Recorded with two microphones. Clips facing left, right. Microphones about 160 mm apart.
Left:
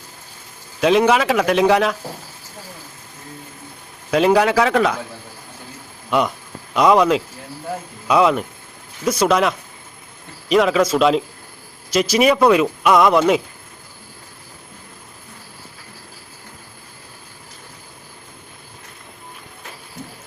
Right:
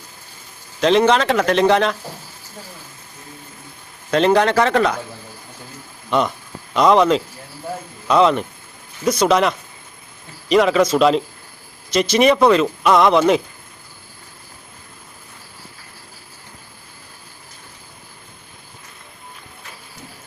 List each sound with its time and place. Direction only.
0.8 s speech: 5° left (ahead or behind)
4.1 s speech: 5° left (ahead or behind)
6.1 s speech: 5° left (ahead or behind)